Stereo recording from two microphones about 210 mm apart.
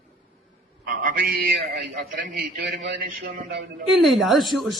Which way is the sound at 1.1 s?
45° right (ahead or behind).